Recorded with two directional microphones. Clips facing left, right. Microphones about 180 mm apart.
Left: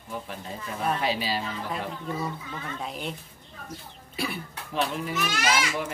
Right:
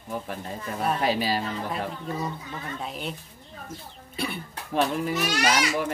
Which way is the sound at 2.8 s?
Centre (ahead or behind).